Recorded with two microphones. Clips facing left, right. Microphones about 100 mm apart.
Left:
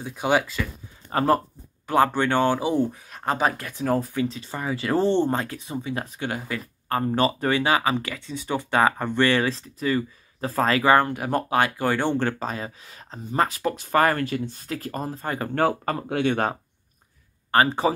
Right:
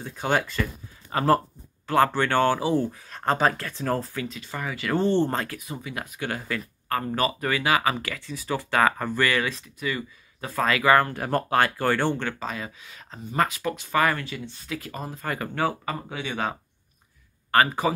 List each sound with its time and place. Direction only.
0.0 s speech: 10° left (ahead or behind)
1.1 s speech: 20° left (ahead or behind)
3.1 s speech: 10° left (ahead or behind)
4.2 s speech: 30° left (ahead or behind)
5.1 s speech: 15° left (ahead or behind)
6.2 s speech: 20° left (ahead or behind)
11.1 s speech: 15° left (ahead or behind)
12.2 s speech: 40° left (ahead or behind)
15.5 s speech: 50° left (ahead or behind)
17.5 s speech: 25° left (ahead or behind)